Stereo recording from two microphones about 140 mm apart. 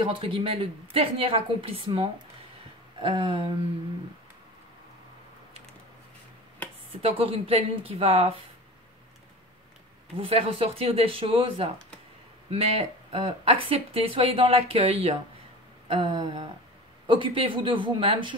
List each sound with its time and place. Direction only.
0.0 s a woman's voice: 40° right (ahead or behind)
7.0 s speech: 45° right (ahead or behind)
10.1 s a woman's voice: 40° right (ahead or behind)